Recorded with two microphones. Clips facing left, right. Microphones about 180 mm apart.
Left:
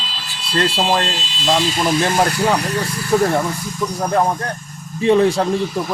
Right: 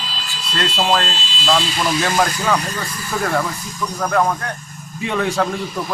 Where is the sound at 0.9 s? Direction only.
20° left (ahead or behind).